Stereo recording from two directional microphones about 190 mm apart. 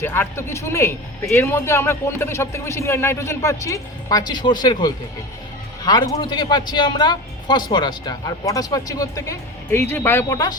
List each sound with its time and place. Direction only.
0.0 s a man's voice: 10° left (ahead or behind)